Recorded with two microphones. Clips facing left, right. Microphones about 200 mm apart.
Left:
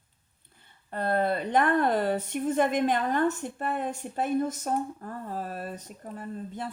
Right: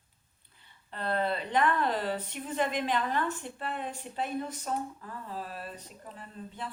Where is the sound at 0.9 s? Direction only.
50° left (ahead or behind).